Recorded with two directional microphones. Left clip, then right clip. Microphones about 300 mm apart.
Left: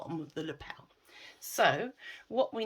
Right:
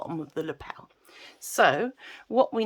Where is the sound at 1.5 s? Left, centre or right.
Centre.